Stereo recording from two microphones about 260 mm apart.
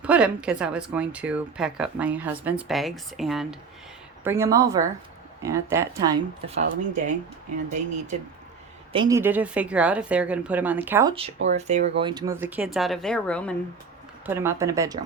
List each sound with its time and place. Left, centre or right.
0.0 s speech: centre; by 7.0 s right
8.9 s speech: centre
11.4 s speech: right; by 13.6 s centre
14.3 s speech: centre